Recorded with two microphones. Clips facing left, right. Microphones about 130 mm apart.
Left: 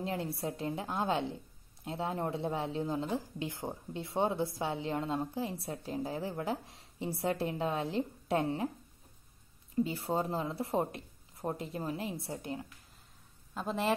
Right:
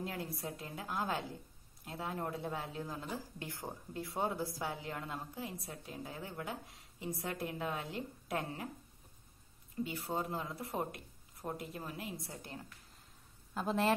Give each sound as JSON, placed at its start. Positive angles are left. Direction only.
{"t": 0.0, "sound": "speech", "side_deg": 25}
{"t": 9.8, "sound": "speech", "side_deg": 30}
{"t": 13.6, "sound": "speech", "side_deg": 0}